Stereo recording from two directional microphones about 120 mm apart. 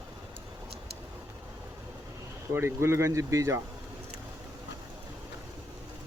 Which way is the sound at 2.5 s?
20° right (ahead or behind).